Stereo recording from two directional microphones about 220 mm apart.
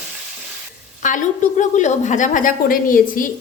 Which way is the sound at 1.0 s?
35° left (ahead or behind).